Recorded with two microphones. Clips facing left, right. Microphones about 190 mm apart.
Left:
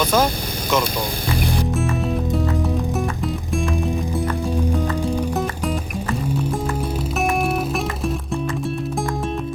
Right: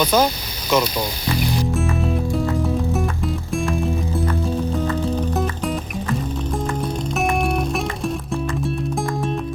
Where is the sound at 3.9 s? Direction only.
15° left (ahead or behind).